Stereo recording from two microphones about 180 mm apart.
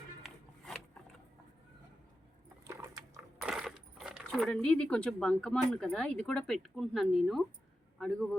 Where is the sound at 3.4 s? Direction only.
5° right (ahead or behind).